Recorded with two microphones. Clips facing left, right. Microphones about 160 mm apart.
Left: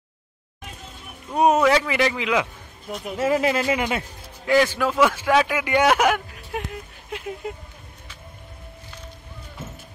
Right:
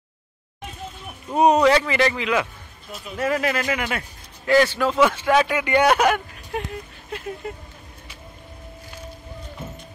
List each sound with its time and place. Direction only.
1.3 s speech: centre (ahead or behind)
3.2 s a man's voice: 25° left (ahead or behind)
4.5 s speech: 10° left (ahead or behind)